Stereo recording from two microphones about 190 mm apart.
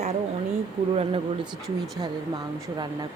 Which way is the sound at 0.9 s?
30° right (ahead or behind).